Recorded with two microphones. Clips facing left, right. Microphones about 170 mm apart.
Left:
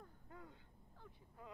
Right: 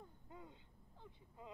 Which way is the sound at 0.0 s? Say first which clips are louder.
Right 1 dB; 20° right (ahead or behind).